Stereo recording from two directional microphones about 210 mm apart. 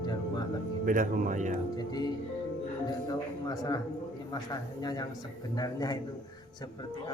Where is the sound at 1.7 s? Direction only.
20° left (ahead or behind).